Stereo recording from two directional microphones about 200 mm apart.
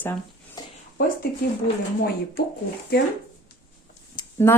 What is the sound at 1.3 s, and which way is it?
Speech, 50° left (ahead or behind).